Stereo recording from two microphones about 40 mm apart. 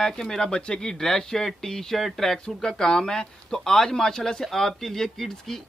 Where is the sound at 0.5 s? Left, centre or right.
Left.